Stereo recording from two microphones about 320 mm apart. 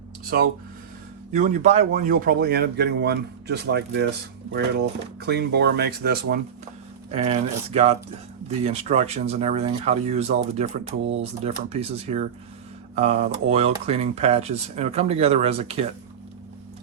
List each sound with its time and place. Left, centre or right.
0.3 s speech: right
5.2 s speech: right
7.1 s speech: centre